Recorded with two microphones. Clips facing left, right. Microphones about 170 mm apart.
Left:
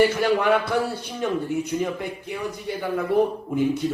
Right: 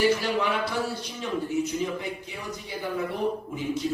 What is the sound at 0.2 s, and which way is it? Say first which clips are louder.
A man's voice: left 7 dB; 55° left (ahead or behind).